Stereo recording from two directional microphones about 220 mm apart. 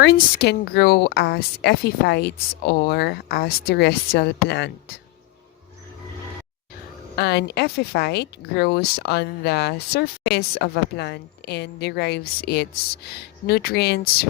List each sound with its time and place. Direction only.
0.0 s a woman's voice: 45° left (ahead or behind)
7.2 s a woman's voice: 50° left (ahead or behind)